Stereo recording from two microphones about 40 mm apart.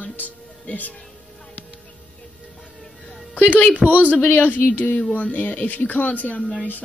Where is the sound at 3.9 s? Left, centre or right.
Left.